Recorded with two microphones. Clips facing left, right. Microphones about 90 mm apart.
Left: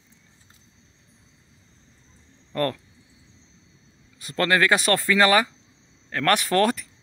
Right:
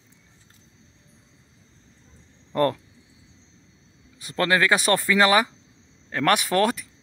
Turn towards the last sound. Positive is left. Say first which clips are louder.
# left 1 dB
turn(degrees=-5)  # may be behind; listen again after turning